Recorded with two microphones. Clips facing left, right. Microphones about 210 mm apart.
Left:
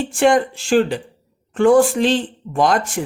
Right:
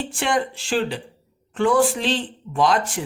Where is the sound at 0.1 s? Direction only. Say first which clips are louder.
Left 10 dB; 50° left (ahead or behind).